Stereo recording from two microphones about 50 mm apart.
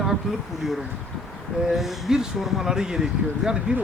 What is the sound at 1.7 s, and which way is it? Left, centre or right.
Speech, centre.